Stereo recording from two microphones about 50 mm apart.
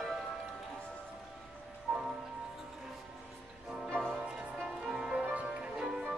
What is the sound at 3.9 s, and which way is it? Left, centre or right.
Music, centre.